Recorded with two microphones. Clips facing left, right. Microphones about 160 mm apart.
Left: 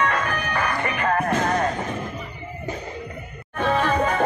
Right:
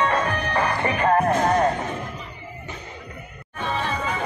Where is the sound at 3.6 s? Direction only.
50° left (ahead or behind).